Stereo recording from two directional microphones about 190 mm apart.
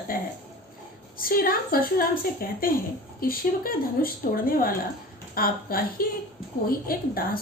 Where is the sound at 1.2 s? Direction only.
50° left (ahead or behind).